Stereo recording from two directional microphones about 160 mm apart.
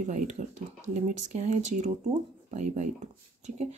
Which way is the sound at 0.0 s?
50° right (ahead or behind).